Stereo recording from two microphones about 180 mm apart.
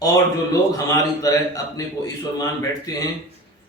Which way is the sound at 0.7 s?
20° left (ahead or behind).